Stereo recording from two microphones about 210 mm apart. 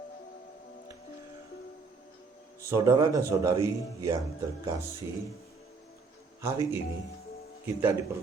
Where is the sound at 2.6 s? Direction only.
15° right (ahead or behind).